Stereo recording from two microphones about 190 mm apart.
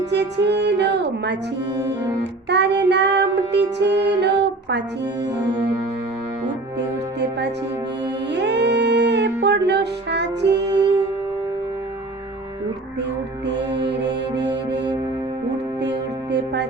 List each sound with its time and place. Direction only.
0.0 s music: 65° right (ahead or behind)
6.7 s music: 65° right (ahead or behind)
13.0 s music: 65° right (ahead or behind)